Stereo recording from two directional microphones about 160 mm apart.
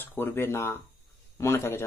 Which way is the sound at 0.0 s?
15° left (ahead or behind).